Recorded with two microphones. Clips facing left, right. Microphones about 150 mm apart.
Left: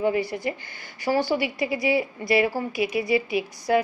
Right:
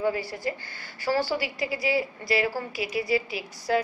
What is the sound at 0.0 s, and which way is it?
A woman's voice, 20° left (ahead or behind).